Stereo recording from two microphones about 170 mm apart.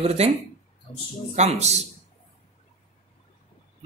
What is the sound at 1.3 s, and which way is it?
Speech, 40° right (ahead or behind).